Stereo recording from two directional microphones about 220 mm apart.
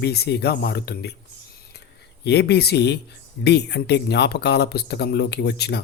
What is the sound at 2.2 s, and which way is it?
Speech, 50° left (ahead or behind).